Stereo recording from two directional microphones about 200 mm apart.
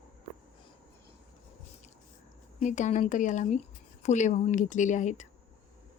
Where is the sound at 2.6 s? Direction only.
35° left (ahead or behind).